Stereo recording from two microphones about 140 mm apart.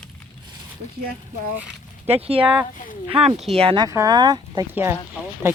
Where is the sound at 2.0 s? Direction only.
45° right (ahead or behind).